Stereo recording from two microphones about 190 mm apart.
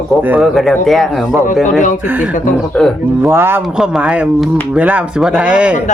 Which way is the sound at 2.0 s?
10° right (ahead or behind).